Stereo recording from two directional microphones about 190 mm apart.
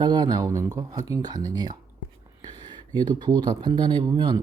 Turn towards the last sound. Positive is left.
turn(degrees=-25)  # may be behind; listen again after turning